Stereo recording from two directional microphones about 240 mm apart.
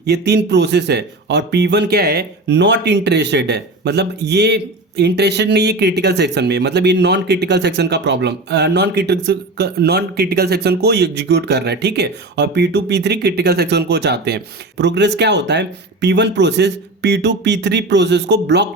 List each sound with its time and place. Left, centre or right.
0.0 s speech: right